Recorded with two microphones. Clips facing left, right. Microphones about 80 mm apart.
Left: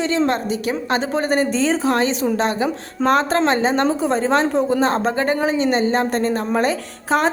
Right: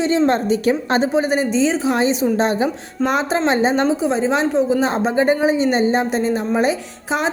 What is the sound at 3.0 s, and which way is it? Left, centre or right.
Speech, centre.